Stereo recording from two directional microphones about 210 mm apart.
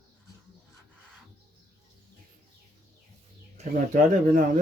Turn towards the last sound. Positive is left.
turn(degrees=-40)  # may be behind; listen again after turning